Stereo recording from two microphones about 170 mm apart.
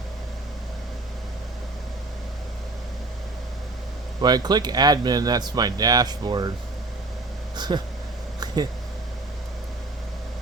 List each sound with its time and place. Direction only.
4.2 s speech: 25° right (ahead or behind)
7.5 s speech: 25° right (ahead or behind)